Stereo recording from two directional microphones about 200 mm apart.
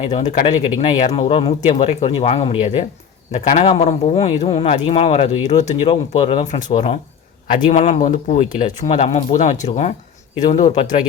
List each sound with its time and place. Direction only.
0.2 s a man's voice: 40° left (ahead or behind)